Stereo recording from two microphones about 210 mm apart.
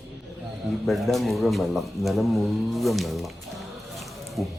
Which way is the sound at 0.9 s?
Centre (ahead or behind).